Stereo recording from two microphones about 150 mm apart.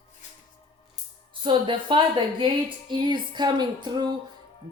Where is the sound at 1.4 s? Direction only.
35° right (ahead or behind).